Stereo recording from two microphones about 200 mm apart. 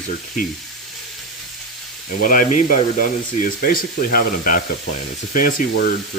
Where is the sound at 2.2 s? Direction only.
40° left (ahead or behind).